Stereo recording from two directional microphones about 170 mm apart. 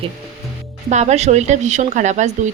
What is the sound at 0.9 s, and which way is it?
Speech, 40° right (ahead or behind).